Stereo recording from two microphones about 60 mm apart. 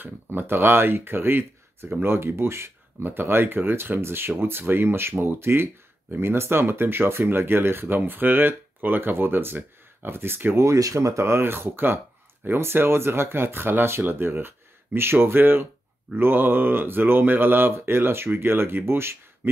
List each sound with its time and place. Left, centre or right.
0.0 s speech: right